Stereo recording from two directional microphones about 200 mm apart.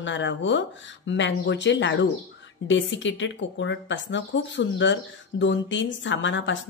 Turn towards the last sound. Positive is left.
turn(degrees=65)  # may be behind; listen again after turning